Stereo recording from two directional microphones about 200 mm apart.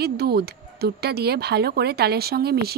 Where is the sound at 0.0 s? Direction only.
50° right (ahead or behind).